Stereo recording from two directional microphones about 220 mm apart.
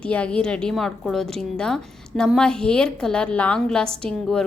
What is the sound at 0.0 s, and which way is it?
A woman's voice, 5° left (ahead or behind).